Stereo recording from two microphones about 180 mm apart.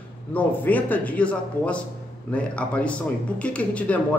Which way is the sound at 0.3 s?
10° left (ahead or behind).